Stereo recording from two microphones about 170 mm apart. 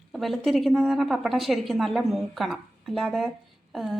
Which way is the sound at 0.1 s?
Centre (ahead or behind).